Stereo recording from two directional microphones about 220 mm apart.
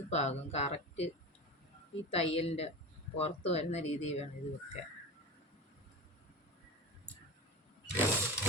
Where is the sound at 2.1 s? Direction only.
25° left (ahead or behind).